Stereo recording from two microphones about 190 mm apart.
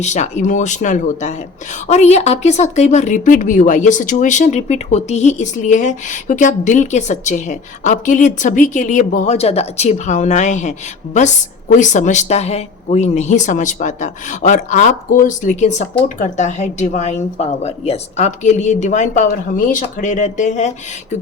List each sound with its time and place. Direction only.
0.0 s speech: 40° left (ahead or behind)